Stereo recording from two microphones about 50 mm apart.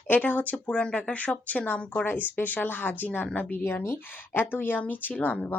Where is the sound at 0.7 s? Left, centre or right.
Left.